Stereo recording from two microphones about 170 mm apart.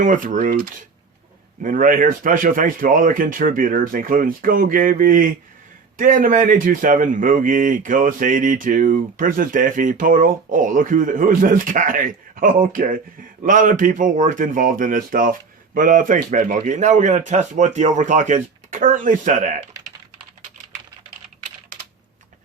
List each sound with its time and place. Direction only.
0.0 s speech: 50° right (ahead or behind)